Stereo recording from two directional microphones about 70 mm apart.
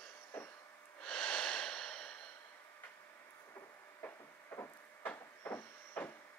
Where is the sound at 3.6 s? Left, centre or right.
Left.